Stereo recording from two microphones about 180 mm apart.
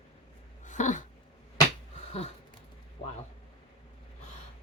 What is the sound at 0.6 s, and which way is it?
Dog, 45° left (ahead or behind).